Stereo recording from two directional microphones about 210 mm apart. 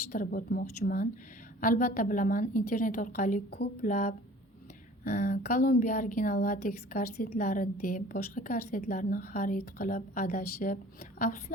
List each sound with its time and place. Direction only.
0.1 s a woman's voice: 45° left (ahead or behind)